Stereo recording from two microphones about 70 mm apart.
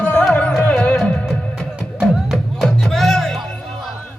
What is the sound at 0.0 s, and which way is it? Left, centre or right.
Music, centre.